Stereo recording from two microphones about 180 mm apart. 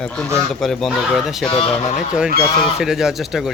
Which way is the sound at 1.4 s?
30° left (ahead or behind).